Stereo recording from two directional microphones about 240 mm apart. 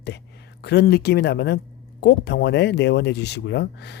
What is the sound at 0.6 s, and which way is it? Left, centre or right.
Speech, left.